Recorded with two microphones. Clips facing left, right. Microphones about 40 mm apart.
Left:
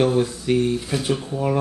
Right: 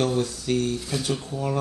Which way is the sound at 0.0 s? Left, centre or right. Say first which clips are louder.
Left 5 dB; left.